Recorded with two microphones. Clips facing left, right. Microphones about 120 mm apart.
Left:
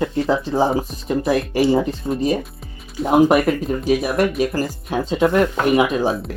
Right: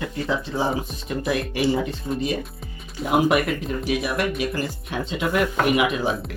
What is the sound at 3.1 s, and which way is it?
Speech, 35° left (ahead or behind).